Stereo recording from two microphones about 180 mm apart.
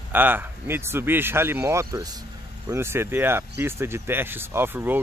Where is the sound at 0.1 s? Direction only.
10° right (ahead or behind).